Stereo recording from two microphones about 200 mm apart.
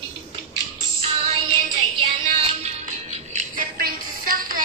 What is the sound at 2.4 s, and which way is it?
Music, 30° right (ahead or behind).